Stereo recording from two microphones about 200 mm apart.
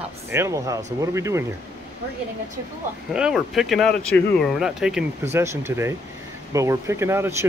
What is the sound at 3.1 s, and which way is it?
Speech, 5° right (ahead or behind).